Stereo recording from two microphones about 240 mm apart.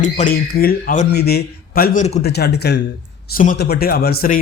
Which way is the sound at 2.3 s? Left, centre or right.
Left.